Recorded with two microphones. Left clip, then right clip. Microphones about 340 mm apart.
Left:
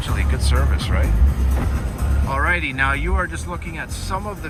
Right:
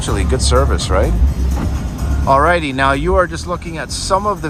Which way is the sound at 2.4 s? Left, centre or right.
Centre.